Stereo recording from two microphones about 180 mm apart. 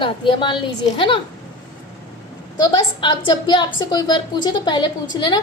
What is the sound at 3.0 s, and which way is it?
A woman's voice, 25° left (ahead or behind).